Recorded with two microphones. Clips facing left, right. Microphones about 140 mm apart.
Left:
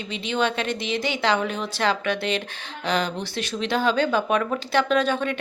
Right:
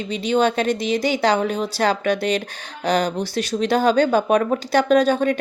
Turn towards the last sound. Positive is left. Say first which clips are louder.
# right 6 dB
turn(degrees=-40)  # may be behind; listen again after turning